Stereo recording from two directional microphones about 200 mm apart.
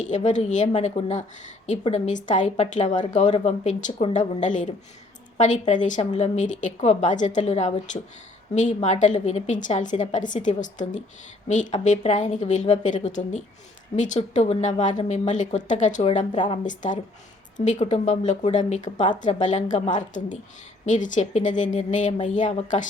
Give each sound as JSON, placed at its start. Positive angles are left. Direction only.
{"t": 0.0, "sound": "speech", "side_deg": 35}
{"t": 16.3, "sound": "a woman's voice", "side_deg": 25}
{"t": 16.6, "sound": "speech", "side_deg": 40}